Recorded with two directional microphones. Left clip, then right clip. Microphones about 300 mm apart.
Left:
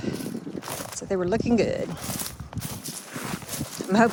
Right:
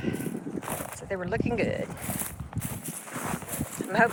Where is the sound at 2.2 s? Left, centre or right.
Centre.